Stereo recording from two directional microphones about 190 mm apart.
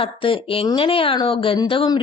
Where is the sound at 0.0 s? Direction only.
30° left (ahead or behind).